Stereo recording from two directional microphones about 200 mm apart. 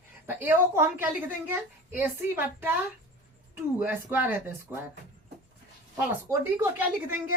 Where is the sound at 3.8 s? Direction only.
10° right (ahead or behind).